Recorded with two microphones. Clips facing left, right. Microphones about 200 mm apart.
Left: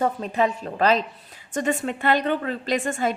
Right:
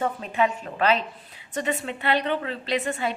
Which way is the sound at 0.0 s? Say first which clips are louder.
Left 2 dB; 40° left (ahead or behind).